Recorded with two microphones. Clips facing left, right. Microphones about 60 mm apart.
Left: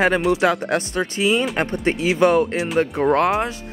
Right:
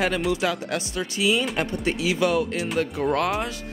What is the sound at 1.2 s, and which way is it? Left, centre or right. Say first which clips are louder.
Speech: left 3 dB; left.